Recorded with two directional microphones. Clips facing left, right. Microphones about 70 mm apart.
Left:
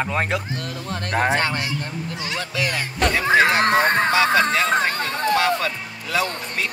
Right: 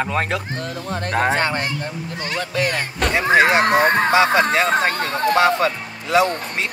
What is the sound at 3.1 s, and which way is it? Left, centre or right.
Speech, right.